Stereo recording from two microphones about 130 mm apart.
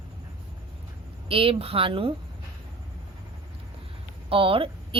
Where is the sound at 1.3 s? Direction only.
45° right (ahead or behind).